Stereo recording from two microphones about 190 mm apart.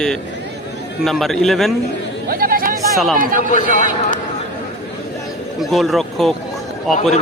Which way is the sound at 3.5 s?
45° left (ahead or behind).